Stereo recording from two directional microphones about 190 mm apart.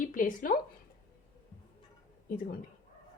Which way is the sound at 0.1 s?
45° left (ahead or behind).